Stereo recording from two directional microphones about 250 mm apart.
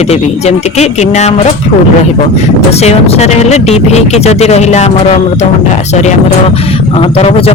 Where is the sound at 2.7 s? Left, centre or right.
Left.